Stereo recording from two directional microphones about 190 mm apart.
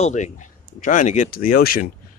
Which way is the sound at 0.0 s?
40° left (ahead or behind).